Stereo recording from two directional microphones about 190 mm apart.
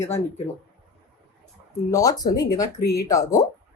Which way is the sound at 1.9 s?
20° left (ahead or behind).